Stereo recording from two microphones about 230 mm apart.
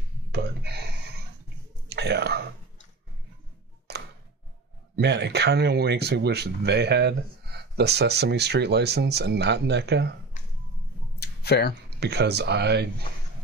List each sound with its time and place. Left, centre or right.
0.3 s a sound: right
1.9 s whispering: right
3.9 s tick: right
4.9 s speech: right
11.1 s a sound: left
12.0 s speech: right